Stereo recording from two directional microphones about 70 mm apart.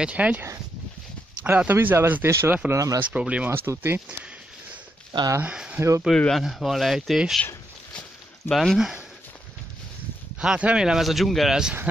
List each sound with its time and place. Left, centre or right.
0.0 s speech: centre
1.4 s speech: right
2.2 s speech: right
2.7 s speech: right
3.0 s speech: centre
3.4 s speech: right
5.4 s speech: centre
5.8 s speech: right
6.1 s speech: centre
6.4 s speech: centre
8.5 s speech: centre
10.4 s speech: centre